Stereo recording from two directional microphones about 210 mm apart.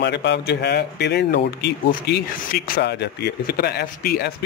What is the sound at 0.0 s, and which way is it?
Speech, 55° left (ahead or behind).